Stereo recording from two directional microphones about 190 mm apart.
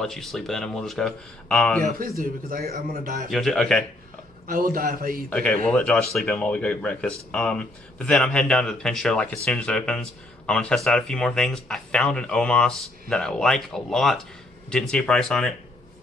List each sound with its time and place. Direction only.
0.0 s speech: centre (ahead or behind)
2.0 s a man's voice: 45° right (ahead or behind)
3.3 s speech: centre (ahead or behind)
4.5 s a man's voice: 50° right (ahead or behind)
5.3 s speech: 5° left (ahead or behind)